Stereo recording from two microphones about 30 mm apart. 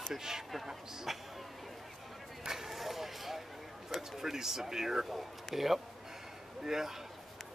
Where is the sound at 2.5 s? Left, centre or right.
Centre.